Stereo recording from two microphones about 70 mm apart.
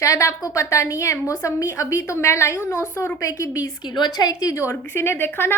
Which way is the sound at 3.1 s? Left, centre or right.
Left.